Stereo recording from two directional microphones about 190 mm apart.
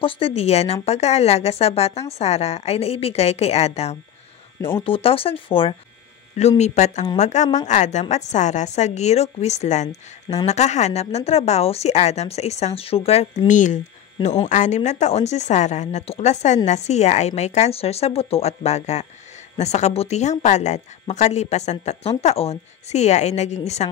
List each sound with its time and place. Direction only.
0.0 s a woman's voice: 30° left (ahead or behind)
4.6 s speech: 10° left (ahead or behind)
4.8 s a woman's voice: 30° left (ahead or behind)